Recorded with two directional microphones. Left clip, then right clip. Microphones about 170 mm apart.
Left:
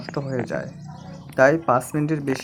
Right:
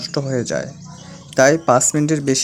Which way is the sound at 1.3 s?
35° right (ahead or behind).